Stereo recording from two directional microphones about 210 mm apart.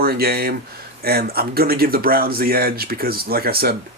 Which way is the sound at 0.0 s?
45° right (ahead or behind).